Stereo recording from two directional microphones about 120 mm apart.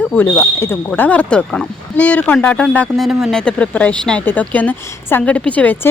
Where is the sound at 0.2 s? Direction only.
15° left (ahead or behind); by 3.4 s centre (ahead or behind).